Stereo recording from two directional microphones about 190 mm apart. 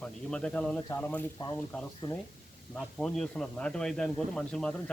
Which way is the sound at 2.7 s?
5° left (ahead or behind).